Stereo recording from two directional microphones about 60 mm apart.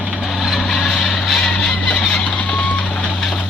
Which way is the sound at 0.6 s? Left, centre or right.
Centre.